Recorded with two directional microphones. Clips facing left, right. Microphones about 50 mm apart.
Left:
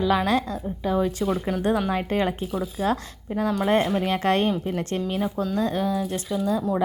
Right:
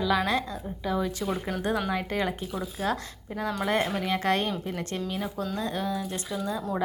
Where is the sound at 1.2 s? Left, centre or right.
Centre.